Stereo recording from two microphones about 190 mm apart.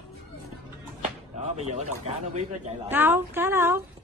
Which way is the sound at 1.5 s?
35° right (ahead or behind).